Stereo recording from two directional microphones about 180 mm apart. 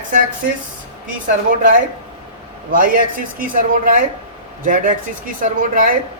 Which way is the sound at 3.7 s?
50° right (ahead or behind).